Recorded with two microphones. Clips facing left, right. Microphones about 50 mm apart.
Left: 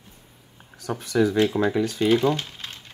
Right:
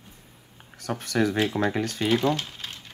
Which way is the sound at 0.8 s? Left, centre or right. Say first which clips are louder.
Left 3 dB; right.